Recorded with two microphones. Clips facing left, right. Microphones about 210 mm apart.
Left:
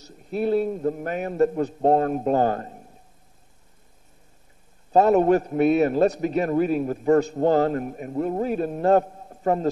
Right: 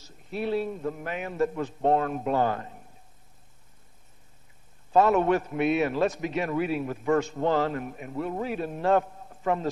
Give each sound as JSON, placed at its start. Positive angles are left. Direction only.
{"t": 0.3, "sound": "a man's voice", "side_deg": 45}
{"t": 4.9, "sound": "a man's voice", "side_deg": 40}